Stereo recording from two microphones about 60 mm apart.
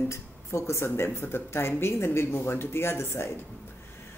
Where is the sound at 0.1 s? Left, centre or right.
Left.